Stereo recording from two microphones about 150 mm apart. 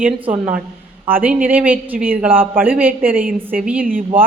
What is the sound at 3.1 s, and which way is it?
Speech, 70° right (ahead or behind).